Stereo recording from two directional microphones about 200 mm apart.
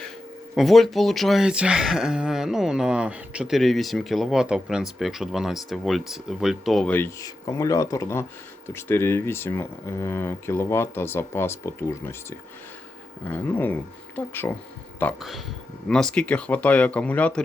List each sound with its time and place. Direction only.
0.5 s speech: centre (ahead or behind)
13.2 s speech: 10° left (ahead or behind)